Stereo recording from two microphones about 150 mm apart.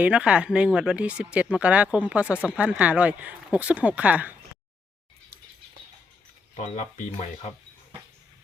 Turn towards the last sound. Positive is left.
turn(degrees=55)  # may be behind; listen again after turning